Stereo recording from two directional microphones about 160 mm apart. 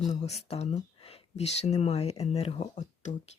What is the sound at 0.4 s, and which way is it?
Speech, 40° left (ahead or behind).